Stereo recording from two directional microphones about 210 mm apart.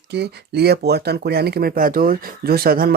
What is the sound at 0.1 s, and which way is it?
Speech, 50° right (ahead or behind).